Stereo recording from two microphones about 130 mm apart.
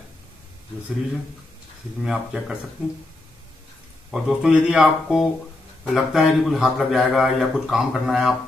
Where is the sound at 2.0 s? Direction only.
5° right (ahead or behind).